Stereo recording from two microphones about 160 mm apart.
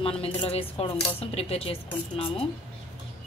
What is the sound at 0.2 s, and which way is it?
Speech, 35° left (ahead or behind).